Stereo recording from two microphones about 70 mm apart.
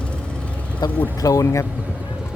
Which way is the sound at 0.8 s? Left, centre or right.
Left.